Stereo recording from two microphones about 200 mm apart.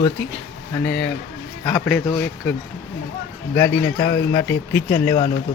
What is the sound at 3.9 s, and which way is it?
Speech, 15° left (ahead or behind).